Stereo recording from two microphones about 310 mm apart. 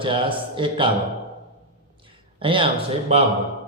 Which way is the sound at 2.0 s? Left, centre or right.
Centre.